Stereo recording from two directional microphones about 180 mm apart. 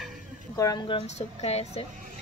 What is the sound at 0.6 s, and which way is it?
Speech, 20° left (ahead or behind).